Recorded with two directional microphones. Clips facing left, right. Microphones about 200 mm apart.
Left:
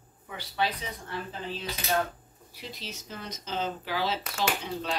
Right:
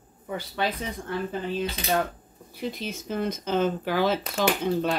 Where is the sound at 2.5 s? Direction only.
55° right (ahead or behind).